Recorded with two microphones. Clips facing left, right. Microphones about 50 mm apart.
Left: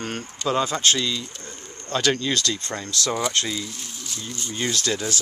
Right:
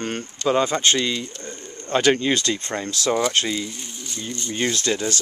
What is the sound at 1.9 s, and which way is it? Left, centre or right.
Speech, centre.